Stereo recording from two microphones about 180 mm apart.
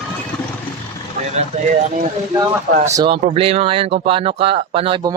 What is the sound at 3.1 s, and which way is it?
Speech, 35° right (ahead or behind).